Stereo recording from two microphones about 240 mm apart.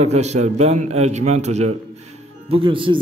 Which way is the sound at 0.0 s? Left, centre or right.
Right.